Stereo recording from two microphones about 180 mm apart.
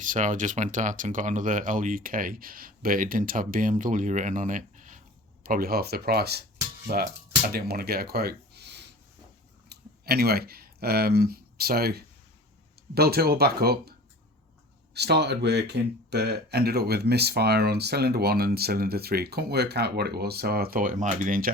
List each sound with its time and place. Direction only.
0.0 s speech: 45° right (ahead or behind); by 13.9 s 60° right (ahead or behind)
14.9 s speech: 65° right (ahead or behind); by 21.5 s 50° right (ahead or behind)